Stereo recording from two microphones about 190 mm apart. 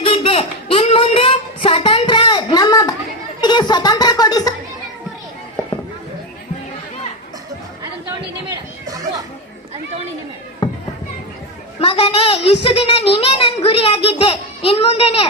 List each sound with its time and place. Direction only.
0.0 s a sound: 30° left (ahead or behind)
3.4 s music: 20° left (ahead or behind)
8.4 s chatter: 20° right (ahead or behind)
11.8 s a sound: 30° left (ahead or behind)
12.6 s a child's voice: 30° left (ahead or behind)
13.1 s child singing: 30° left (ahead or behind)